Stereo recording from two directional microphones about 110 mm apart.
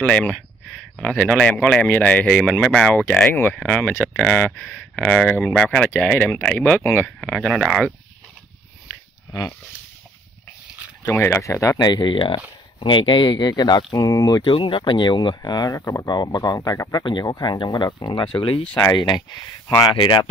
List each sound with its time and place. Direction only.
0.0 s a man's voice: 10° left (ahead or behind)
11.1 s speech: 25° left (ahead or behind)
11.8 s speech: 40° left (ahead or behind)
17.0 s speech: 40° left (ahead or behind)
18.9 s speech: 40° left (ahead or behind)